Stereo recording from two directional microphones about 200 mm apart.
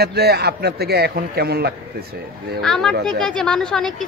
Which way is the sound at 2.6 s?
Centre (ahead or behind).